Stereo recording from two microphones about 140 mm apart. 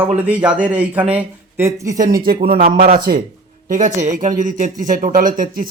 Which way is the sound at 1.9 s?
85° right.